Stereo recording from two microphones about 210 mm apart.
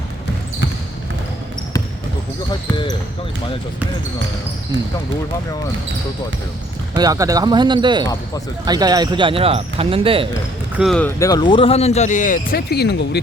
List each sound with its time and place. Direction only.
6.9 s speech: 15° right (ahead or behind)
10.8 s speech: 5° left (ahead or behind)
11.2 s speech: 20° left (ahead or behind); by 13.0 s 50° left (ahead or behind)